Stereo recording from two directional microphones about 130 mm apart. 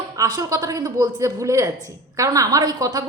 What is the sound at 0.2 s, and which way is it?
A woman's voice, 30° right (ahead or behind).